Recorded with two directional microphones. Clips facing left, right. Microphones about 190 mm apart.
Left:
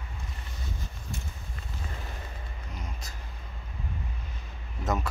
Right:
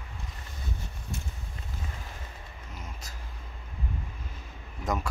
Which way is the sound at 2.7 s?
5° right (ahead or behind).